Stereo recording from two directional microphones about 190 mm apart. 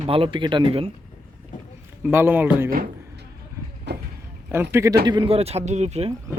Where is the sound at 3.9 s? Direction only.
60° right (ahead or behind).